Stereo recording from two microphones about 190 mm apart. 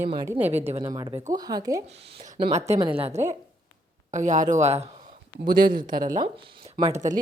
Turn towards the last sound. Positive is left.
turn(degrees=-40)  # may be behind; listen again after turning